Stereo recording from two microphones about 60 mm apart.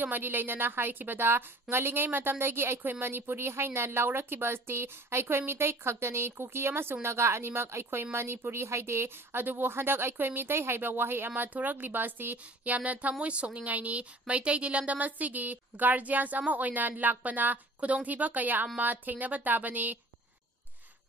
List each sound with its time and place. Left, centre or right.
0.0 s speech: right